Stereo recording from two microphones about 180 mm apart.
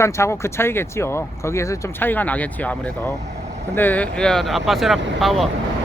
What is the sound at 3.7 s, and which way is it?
Speech, 10° left (ahead or behind).